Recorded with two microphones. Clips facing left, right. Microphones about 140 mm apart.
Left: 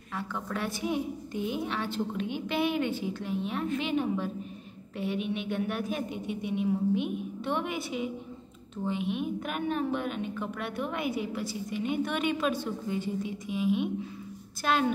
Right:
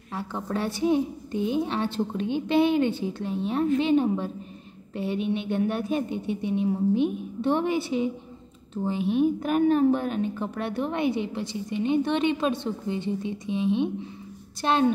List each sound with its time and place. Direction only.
0.1 s a woman's voice: 30° right (ahead or behind)